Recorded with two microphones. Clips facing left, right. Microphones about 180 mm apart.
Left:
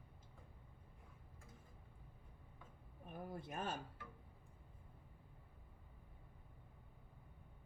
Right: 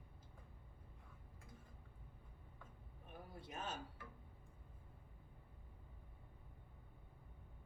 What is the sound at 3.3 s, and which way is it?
Speech, 50° left (ahead or behind).